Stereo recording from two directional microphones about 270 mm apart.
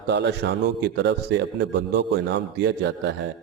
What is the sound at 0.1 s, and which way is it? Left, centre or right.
A man's voice, right.